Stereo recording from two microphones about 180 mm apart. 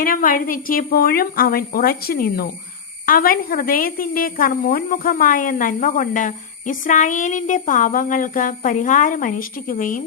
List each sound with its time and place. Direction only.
0.0 s speech: 50° left (ahead or behind)